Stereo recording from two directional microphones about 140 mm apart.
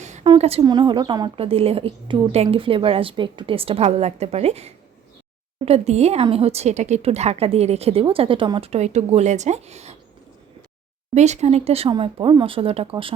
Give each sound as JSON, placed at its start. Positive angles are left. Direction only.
{"t": 0.0, "sound": "a sound", "side_deg": -55}
{"t": 0.3, "sound": "a woman's voice", "side_deg": -45}
{"t": 0.6, "sound": "a woman's voice", "side_deg": -30}
{"t": 11.1, "sound": "a woman's voice", "side_deg": -55}